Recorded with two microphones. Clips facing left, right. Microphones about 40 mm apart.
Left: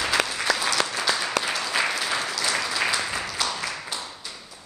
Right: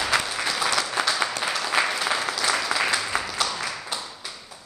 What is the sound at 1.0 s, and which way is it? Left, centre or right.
Applause, right.